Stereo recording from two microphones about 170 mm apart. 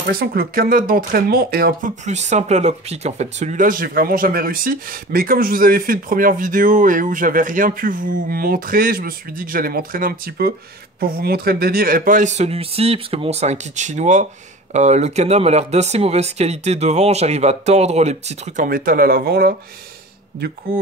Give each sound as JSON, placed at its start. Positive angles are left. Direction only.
{"t": 0.0, "sound": "speech", "side_deg": -65}